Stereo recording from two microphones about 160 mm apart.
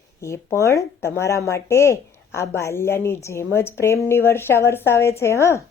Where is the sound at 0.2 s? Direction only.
20° left (ahead or behind).